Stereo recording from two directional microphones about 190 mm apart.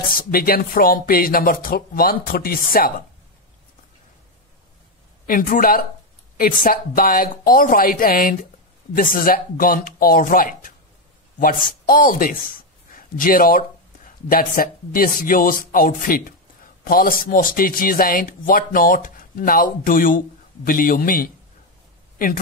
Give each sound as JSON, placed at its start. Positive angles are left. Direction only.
{"t": 0.2, "sound": "speech", "side_deg": 50}
{"t": 5.2, "sound": "speech", "side_deg": 45}
{"t": 11.9, "sound": "speech", "side_deg": 50}